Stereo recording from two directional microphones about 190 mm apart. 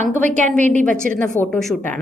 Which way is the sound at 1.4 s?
5° left (ahead or behind).